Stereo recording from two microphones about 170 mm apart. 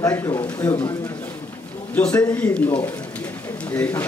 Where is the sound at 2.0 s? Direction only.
5° left (ahead or behind).